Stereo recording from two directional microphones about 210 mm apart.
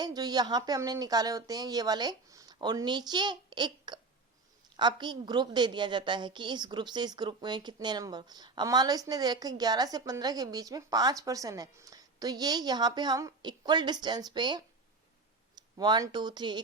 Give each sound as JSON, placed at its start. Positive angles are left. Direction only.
{"t": 0.0, "sound": "a woman's voice", "side_deg": -20}
{"t": 15.8, "sound": "a woman's voice", "side_deg": -20}